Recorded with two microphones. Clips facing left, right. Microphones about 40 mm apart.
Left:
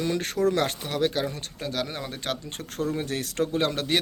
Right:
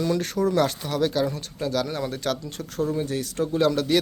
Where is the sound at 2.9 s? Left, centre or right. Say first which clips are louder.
Right 2 dB; left.